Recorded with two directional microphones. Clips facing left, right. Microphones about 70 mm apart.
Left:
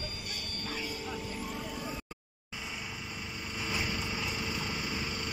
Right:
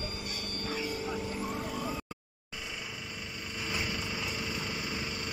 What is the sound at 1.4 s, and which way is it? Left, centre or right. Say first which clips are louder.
Vehicle: right 3 dB; right.